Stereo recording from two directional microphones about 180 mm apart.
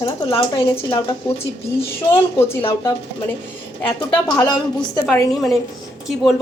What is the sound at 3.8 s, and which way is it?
A woman's voice, 20° left (ahead or behind).